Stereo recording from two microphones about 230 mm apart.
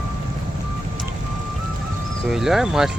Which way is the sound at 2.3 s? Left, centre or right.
Centre.